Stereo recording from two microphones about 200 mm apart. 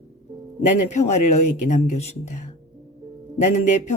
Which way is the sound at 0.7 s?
35° left (ahead or behind).